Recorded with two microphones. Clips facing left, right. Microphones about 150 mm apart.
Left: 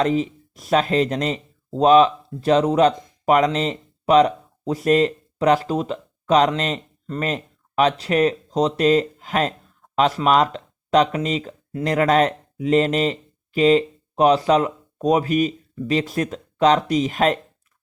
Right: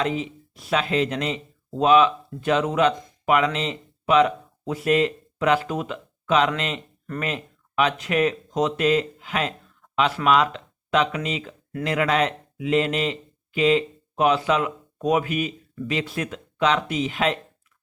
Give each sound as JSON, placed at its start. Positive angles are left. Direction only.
{"t": 0.0, "sound": "speech", "side_deg": 40}